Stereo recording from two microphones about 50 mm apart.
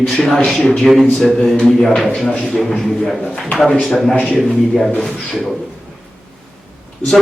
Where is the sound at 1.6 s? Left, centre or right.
Centre.